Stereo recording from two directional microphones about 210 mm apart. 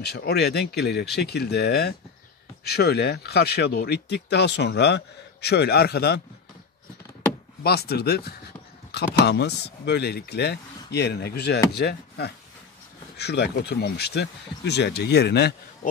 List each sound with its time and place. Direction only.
0.0 s speech: 50° left (ahead or behind)
7.6 s speech: 50° left (ahead or behind)